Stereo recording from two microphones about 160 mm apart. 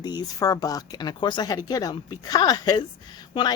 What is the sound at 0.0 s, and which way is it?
A woman's voice, 25° left (ahead or behind).